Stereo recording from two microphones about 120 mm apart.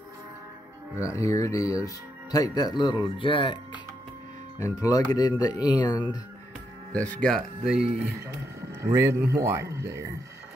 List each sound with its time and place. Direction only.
0.9 s speech: 25° left (ahead or behind); by 3.8 s 45° left (ahead or behind)
4.6 s speech: 30° left (ahead or behind)
6.9 s speech: 10° left (ahead or behind)
8.0 s a man's voice: 25° right (ahead or behind)